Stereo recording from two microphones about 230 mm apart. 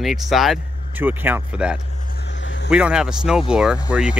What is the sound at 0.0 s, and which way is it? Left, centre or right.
Speech, centre.